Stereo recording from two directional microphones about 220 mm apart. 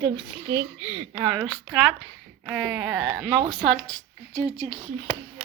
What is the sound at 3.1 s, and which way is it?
Speech, 5° right (ahead or behind).